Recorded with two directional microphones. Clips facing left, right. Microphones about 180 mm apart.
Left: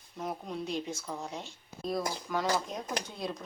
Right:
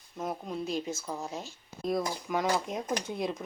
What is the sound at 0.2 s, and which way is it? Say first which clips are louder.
Speech: right 2 dB; centre (ahead or behind).